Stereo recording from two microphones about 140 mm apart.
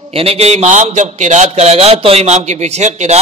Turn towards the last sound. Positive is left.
turn(degrees=-55)  # may be behind; listen again after turning